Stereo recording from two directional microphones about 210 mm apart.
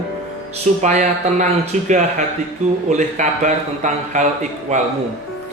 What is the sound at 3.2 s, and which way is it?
Speech, 35° right (ahead or behind).